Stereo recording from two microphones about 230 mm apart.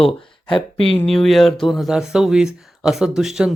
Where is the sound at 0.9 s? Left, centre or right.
Centre.